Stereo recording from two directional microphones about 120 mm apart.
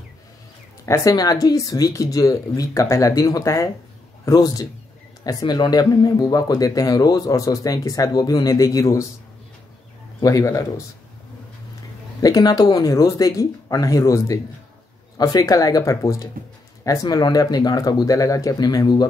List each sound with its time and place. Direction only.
0.8 s speech: 25° left (ahead or behind)
10.2 s speech: 25° left (ahead or behind)
12.2 s speech: 30° left (ahead or behind)